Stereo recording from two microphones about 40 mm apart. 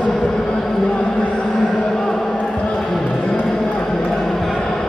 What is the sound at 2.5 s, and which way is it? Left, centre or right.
Basketball bounce, left.